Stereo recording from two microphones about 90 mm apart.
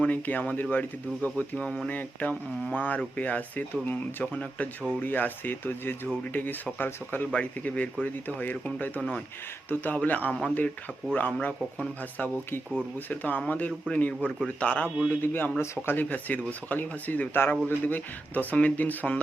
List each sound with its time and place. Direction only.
0.0 s speech: 15° left (ahead or behind)
15.6 s speech: 30° left (ahead or behind)
16.0 s speech: 20° left (ahead or behind)